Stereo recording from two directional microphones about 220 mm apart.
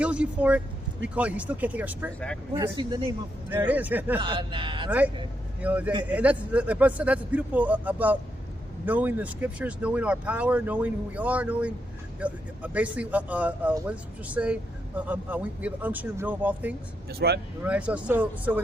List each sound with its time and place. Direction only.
0.0 s speech: 5° right (ahead or behind)
2.7 s speech: 20° right (ahead or behind)
3.7 s speech: 5° right (ahead or behind)
4.2 s speech: 20° right (ahead or behind)
4.9 s speech: 5° right (ahead or behind)
17.1 s speech: 45° right (ahead or behind)
17.6 s speech: 5° right (ahead or behind)